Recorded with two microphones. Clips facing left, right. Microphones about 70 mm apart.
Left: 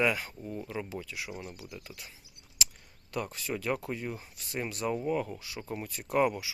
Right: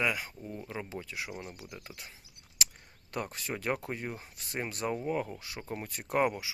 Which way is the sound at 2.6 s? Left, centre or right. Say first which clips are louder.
Even; right.